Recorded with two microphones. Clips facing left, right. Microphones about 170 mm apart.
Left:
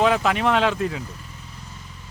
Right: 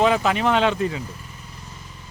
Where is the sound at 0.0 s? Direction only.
Centre (ahead or behind).